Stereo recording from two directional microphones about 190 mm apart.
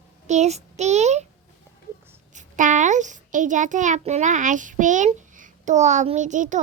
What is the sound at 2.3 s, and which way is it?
A child's voice, 40° right (ahead or behind).